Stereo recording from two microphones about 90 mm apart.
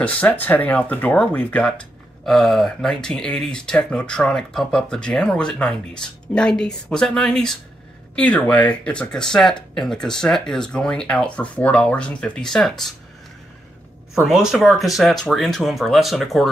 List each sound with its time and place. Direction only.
0.0 s speech: 15° left (ahead or behind)
14.2 s speech: 5° right (ahead or behind)